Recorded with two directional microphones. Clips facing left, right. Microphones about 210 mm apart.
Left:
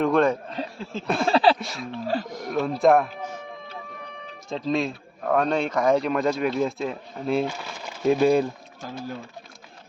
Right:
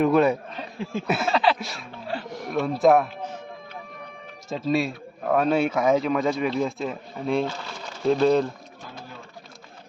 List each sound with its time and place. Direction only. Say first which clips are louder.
0.0 s a sound: right 1 dB; 5° right (ahead or behind)
1.3 s speech: left 4 dB; 30° left (ahead or behind)
1.5 s speech: left 3 dB; centre (ahead or behind)
2.0 s speech: left 3 dB; 40° left (ahead or behind)
2.4 s speech: right 1 dB; centre (ahead or behind)
4.4 s speech: right 1 dB; 5° right (ahead or behind); by 8.4 s 10° left (ahead or behind)